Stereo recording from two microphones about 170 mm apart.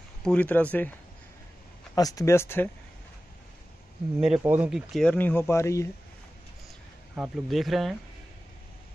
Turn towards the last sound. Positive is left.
turn(degrees=0)  # may be behind; listen again after turning